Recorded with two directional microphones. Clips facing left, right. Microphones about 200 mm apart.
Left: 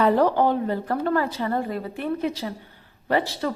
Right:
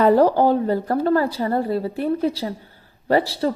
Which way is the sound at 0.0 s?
35° right (ahead or behind).